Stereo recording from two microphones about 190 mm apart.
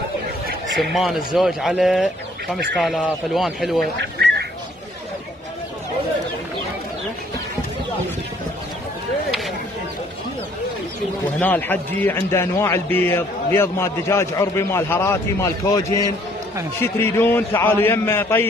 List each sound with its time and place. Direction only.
0.7 s speech: centre (ahead or behind)
3.8 s fowl: 60° right (ahead or behind)
11.3 s a man's voice: 10° left (ahead or behind)